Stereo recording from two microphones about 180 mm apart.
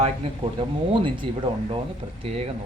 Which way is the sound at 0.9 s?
30° right (ahead or behind).